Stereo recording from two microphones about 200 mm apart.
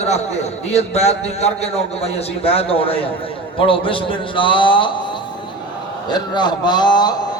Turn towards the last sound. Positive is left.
turn(degrees=20)  # may be behind; listen again after turning